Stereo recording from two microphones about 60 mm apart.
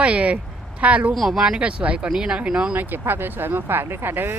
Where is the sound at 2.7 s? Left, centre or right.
Right.